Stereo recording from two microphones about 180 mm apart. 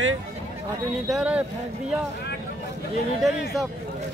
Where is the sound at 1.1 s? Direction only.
5° right (ahead or behind).